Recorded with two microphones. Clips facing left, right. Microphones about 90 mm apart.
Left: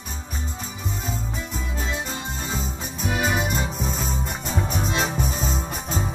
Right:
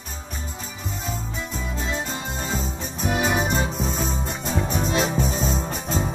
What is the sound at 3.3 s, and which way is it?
Music, 25° right (ahead or behind).